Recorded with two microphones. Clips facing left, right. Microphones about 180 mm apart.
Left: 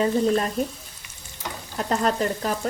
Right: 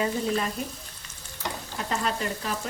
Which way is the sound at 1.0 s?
15° left (ahead or behind).